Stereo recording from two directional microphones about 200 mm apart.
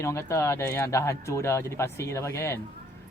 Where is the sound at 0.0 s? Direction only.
15° left (ahead or behind).